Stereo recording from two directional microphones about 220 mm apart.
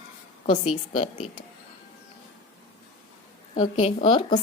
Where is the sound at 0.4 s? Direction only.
30° left (ahead or behind).